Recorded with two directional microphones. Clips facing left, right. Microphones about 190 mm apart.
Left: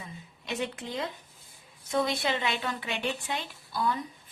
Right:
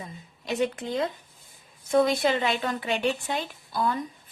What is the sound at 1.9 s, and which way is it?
A woman's voice, 45° right (ahead or behind).